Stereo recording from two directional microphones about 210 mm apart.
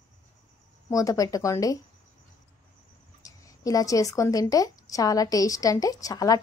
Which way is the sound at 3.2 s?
15° left (ahead or behind).